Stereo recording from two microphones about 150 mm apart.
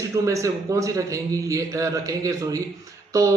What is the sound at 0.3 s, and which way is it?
Speech, 20° right (ahead or behind).